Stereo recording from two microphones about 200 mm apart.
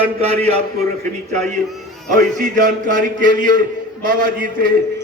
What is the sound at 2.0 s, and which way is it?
Music, 40° right (ahead or behind).